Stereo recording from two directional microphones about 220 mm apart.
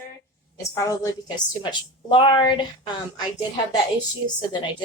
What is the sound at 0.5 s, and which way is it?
A woman's voice, 15° left (ahead or behind).